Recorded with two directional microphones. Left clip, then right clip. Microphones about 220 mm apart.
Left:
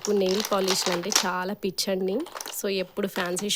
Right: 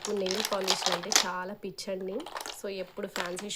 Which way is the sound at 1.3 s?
45° left (ahead or behind).